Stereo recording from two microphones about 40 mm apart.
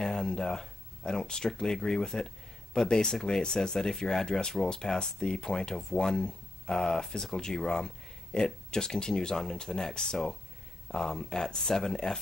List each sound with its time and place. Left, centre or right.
0.0 s speech: centre